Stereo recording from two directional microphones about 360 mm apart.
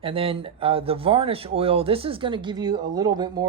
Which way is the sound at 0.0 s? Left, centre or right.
Centre.